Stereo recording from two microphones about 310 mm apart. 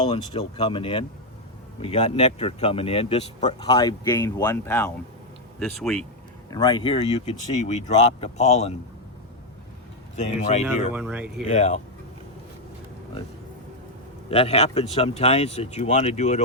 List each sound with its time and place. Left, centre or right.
0.0 s speech: centre
6.5 s speech: centre
10.2 s speech: left
10.9 s speech: centre
11.5 s speech: left
14.3 s speech: centre